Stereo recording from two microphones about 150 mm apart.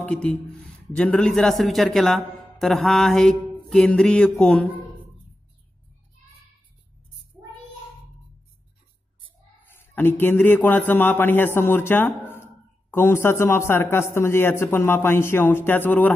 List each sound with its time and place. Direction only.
0.0 s speech: 5° left (ahead or behind)
7.3 s child singing: 20° right (ahead or behind)
9.9 s a man's voice: 15° left (ahead or behind)